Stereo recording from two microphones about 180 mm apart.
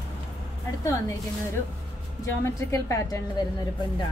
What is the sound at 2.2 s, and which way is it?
A woman's voice, 15° left (ahead or behind).